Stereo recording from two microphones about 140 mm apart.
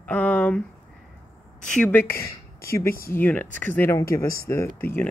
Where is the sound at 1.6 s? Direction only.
5° left (ahead or behind).